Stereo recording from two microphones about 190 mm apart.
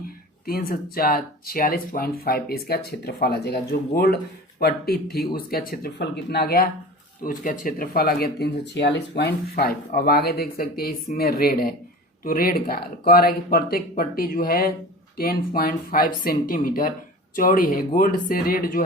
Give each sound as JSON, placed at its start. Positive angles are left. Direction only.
{"t": 0.4, "sound": "speech", "side_deg": 50}
{"t": 7.2, "sound": "speech", "side_deg": 45}